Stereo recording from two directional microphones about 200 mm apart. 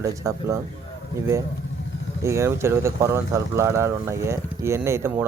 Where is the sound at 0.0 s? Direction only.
15° right (ahead or behind).